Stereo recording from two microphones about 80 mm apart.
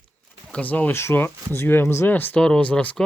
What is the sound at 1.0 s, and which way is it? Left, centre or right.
Speech, left.